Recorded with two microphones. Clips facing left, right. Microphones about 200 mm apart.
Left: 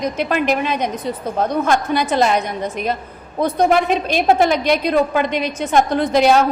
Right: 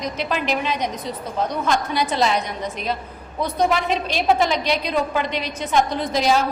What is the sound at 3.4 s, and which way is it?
A woman's voice, 55° left (ahead or behind).